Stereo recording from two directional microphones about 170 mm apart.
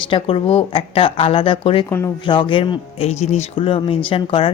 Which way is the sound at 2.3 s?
30° left (ahead or behind).